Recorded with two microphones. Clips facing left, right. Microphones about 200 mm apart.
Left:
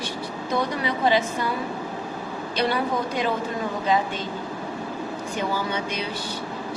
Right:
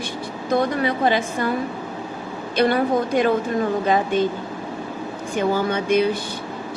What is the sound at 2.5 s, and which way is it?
Speech, 50° right (ahead or behind).